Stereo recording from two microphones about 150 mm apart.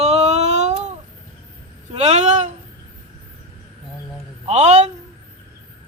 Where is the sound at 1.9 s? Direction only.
45° right (ahead or behind).